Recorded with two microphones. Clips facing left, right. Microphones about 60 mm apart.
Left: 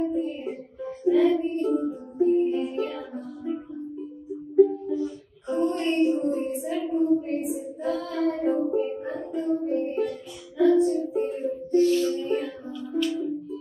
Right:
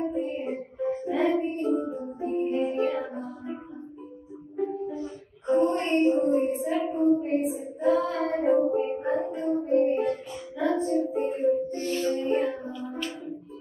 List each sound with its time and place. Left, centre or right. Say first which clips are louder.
0.0 s music: left 2 dB; right
4.6 s a sound: left 10 dB; right
10.6 s music: left 5 dB; right